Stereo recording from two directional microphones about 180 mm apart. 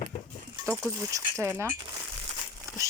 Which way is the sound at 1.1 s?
15° right (ahead or behind).